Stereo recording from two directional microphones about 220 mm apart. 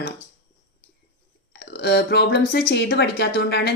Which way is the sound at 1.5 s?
45° left (ahead or behind).